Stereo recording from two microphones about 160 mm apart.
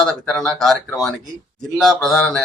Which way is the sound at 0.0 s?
5° left (ahead or behind).